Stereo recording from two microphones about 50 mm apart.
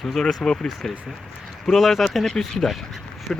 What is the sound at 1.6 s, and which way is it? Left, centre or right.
Speech, centre.